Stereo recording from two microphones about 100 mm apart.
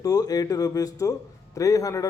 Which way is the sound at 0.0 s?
40° left (ahead or behind).